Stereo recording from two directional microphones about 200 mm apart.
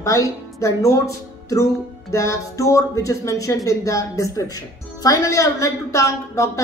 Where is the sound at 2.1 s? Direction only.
15° left (ahead or behind).